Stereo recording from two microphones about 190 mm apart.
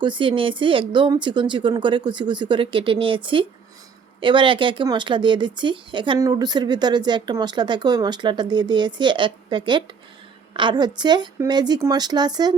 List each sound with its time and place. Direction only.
0.0 s speech: 25° right (ahead or behind)